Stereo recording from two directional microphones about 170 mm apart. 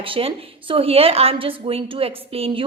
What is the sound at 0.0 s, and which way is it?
A woman's voice, 30° right (ahead or behind).